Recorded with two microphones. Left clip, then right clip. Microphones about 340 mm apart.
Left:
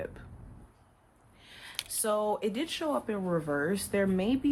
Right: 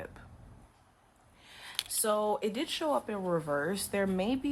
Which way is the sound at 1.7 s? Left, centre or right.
Centre.